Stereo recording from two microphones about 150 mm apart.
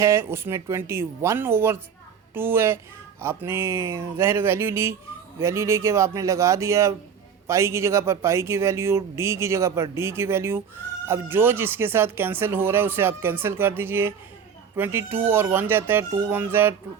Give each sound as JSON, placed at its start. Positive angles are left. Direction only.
{"t": 0.0, "sound": "speech", "side_deg": -15}